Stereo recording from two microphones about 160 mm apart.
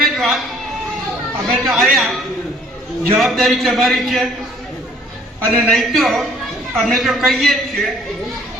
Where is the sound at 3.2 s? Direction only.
Centre (ahead or behind).